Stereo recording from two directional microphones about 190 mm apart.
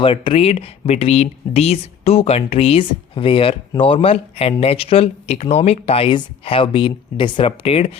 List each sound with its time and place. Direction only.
0.0 s speech: 30° left (ahead or behind)